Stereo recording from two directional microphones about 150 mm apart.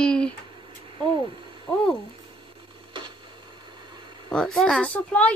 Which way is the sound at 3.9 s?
30° right (ahead or behind).